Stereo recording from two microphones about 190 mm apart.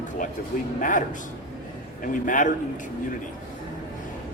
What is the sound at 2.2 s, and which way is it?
Speech, 45° left (ahead or behind).